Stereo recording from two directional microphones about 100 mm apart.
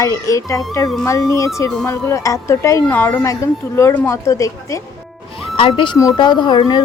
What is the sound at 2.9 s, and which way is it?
Speech, 15° left (ahead or behind).